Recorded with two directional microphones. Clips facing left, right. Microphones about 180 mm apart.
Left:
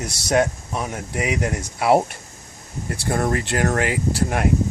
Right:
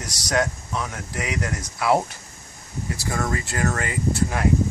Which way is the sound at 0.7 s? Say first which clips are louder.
Left 2 dB; 25° left (ahead or behind).